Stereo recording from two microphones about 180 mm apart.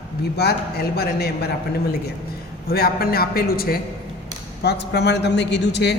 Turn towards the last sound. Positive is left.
turn(degrees=70)  # may be behind; listen again after turning